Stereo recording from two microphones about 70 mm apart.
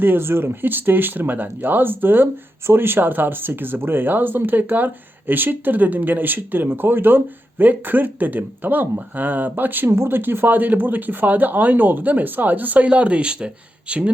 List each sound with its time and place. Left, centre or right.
0.0 s speech: right; by 14.1 s centre